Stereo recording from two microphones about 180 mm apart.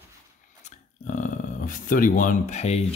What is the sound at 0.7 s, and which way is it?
Speech, 45° left (ahead or behind).